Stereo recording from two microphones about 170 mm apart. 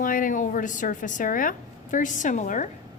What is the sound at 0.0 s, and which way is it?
A woman's voice, 55° left (ahead or behind).